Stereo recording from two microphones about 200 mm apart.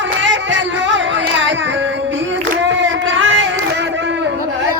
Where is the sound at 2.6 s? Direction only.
65° right (ahead or behind).